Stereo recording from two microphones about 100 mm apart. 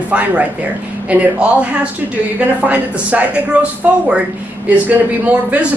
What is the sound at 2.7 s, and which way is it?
Speech, 15° right (ahead or behind).